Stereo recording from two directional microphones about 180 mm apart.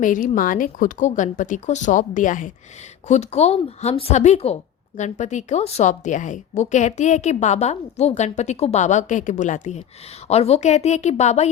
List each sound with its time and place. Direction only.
0.0 s a woman's voice: 45° left (ahead or behind)